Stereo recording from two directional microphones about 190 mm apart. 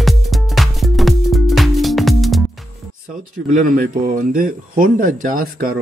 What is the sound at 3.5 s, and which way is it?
Speech, 45° right (ahead or behind).